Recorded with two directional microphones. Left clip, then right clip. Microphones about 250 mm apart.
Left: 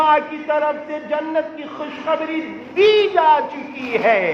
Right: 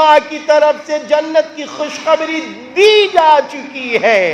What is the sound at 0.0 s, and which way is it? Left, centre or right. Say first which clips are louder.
A man's voice: right 7 dB; right.